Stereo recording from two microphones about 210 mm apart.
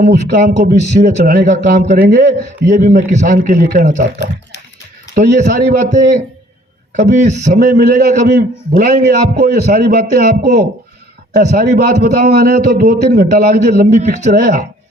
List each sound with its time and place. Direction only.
0.0 s a man's voice: 40° right (ahead or behind)
5.1 s a man's voice: 40° right (ahead or behind)